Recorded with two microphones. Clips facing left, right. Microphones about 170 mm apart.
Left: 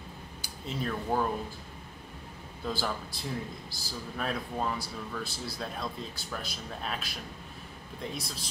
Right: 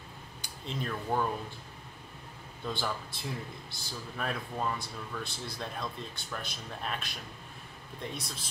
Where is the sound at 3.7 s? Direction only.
Centre (ahead or behind).